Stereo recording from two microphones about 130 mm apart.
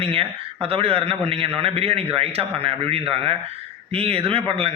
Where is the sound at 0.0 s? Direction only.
45° right (ahead or behind).